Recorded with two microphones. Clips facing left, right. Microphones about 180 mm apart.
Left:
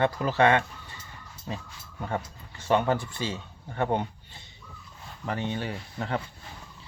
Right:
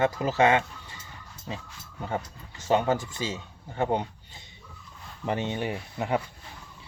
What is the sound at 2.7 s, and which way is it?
Speech, 20° right (ahead or behind).